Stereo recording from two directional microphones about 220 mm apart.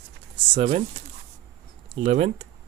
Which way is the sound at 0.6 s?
30° right (ahead or behind).